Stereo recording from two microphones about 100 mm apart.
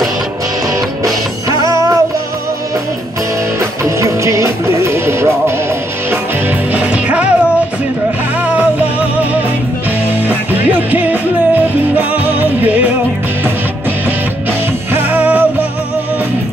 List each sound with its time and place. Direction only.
1.6 s music: 35° right (ahead or behind)
3.8 s music: 30° right (ahead or behind)
6.7 s music: 15° right (ahead or behind)
10.7 s music: 20° right (ahead or behind)
14.9 s music: 20° right (ahead or behind)